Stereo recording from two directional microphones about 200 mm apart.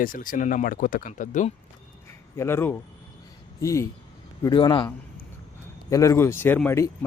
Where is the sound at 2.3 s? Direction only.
10° left (ahead or behind).